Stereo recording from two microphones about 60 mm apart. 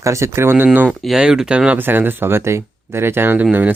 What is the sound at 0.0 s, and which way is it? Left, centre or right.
Speech, right.